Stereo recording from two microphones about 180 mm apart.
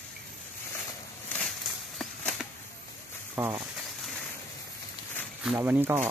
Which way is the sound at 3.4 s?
10° right (ahead or behind).